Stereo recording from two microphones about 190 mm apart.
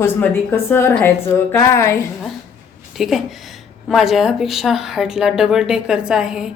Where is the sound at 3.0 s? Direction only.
Centre (ahead or behind).